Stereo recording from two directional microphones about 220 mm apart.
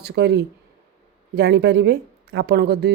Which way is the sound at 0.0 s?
50° right (ahead or behind).